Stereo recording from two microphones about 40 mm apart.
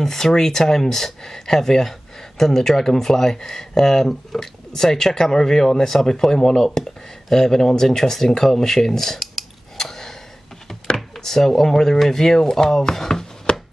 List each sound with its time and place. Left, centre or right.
0.0 s speech: centre
9.8 s gasp: centre
11.1 s speech: centre
13.5 s a sound: left